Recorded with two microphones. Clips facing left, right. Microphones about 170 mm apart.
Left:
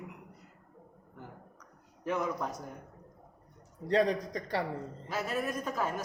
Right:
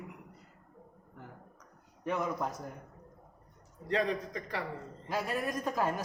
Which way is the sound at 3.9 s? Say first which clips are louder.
Left 4 dB; 35° left (ahead or behind).